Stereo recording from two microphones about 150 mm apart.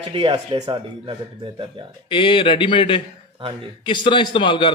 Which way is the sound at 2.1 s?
35° left (ahead or behind).